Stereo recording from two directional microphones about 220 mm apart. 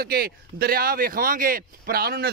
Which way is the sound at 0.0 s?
45° right (ahead or behind).